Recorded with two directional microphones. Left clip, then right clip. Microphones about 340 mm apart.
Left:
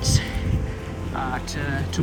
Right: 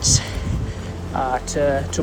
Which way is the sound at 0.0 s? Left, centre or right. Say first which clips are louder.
Right 5 dB; right.